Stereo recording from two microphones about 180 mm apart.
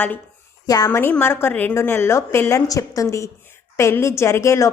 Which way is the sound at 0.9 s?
10° left (ahead or behind).